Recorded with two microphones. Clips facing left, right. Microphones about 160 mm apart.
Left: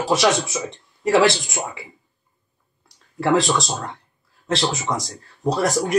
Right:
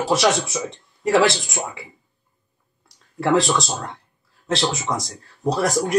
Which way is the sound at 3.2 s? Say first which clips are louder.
Even; centre (ahead or behind).